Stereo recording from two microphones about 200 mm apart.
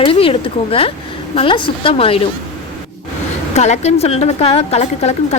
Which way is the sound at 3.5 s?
35° left (ahead or behind).